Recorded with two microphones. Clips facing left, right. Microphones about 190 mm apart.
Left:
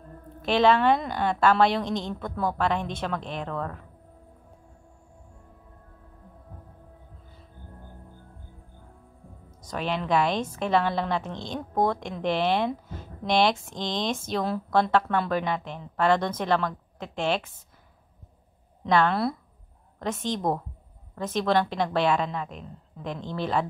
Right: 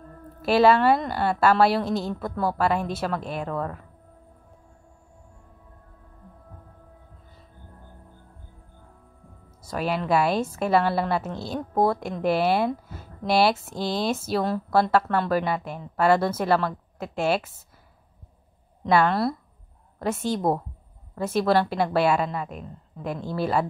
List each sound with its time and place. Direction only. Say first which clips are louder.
0.4 s a woman's voice: right 3 dB; 5° right (ahead or behind)
9.6 s a woman's voice: right 3 dB; 10° right (ahead or behind)
18.9 s a woman's voice: right 2 dB; 5° right (ahead or behind)